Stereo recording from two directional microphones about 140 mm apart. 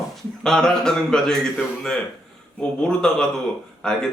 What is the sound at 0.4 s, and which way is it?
A man's voice, 5° left (ahead or behind).